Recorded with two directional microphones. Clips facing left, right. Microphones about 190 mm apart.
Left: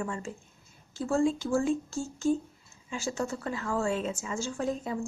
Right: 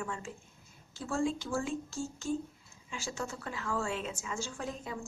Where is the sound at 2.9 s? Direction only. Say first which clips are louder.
Left 7 dB; 45° left (ahead or behind).